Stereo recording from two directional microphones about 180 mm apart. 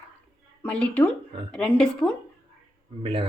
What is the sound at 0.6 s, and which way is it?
Speech, 5° left (ahead or behind).